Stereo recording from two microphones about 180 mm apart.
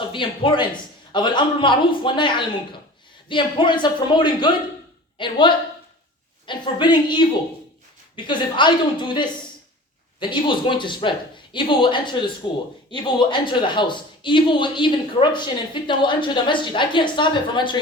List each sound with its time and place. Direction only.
0.1 s speech: 25° left (ahead or behind)